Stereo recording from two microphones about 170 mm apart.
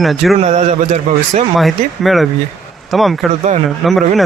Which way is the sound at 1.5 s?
Centre (ahead or behind).